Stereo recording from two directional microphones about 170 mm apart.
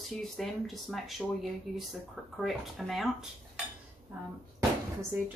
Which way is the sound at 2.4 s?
Centre (ahead or behind).